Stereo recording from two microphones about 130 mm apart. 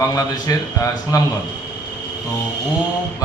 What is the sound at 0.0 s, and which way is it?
A man's voice, 25° left (ahead or behind).